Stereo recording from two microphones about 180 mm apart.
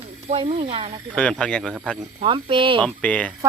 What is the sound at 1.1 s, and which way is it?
Speech, 5° left (ahead or behind).